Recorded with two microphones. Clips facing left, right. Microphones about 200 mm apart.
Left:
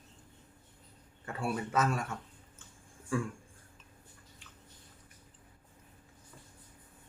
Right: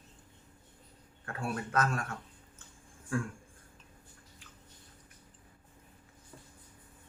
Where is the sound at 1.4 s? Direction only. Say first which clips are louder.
Left 1 dB; 5° left (ahead or behind).